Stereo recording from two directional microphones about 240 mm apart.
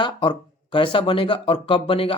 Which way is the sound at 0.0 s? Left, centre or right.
Left.